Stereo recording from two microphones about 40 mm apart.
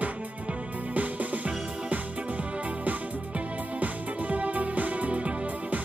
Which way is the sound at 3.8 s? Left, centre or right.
Right.